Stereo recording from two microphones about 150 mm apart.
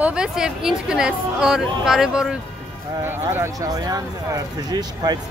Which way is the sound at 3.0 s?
15° right (ahead or behind).